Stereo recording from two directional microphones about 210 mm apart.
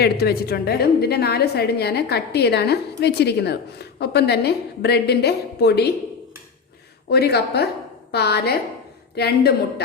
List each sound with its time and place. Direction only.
0.0 s a woman's voice: 50° left (ahead or behind)
7.1 s a woman's voice: 50° left (ahead or behind)